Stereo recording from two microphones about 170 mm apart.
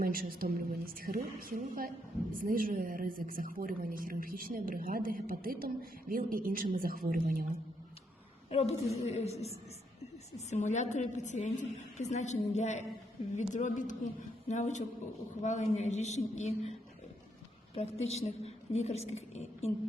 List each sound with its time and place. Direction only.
0.0 s speech: 60° right (ahead or behind)
8.4 s a woman's voice: 40° left (ahead or behind)
17.7 s a woman's voice: 40° left (ahead or behind)